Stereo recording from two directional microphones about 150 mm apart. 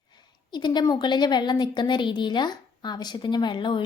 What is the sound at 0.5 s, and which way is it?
A woman's voice, 30° left (ahead or behind).